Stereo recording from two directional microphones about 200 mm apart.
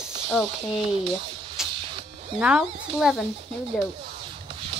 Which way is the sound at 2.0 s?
35° right (ahead or behind).